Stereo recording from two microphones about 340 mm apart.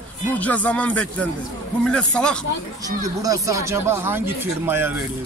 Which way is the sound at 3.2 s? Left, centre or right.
Centre.